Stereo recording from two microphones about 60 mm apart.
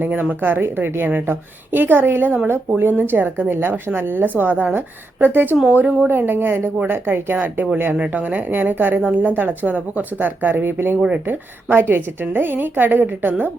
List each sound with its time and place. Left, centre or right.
0.0 s a woman's voice: right